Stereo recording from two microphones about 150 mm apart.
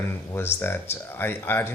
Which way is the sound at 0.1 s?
15° left (ahead or behind).